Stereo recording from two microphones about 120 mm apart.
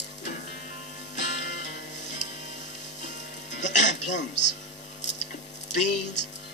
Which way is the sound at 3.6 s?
90° left.